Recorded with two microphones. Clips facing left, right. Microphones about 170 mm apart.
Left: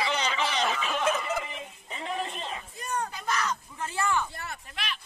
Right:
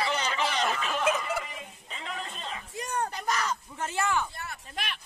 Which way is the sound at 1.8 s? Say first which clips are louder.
Left 6 dB; 25° left (ahead or behind).